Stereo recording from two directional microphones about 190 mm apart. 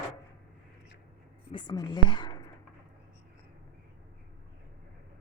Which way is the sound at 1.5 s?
25° left (ahead or behind).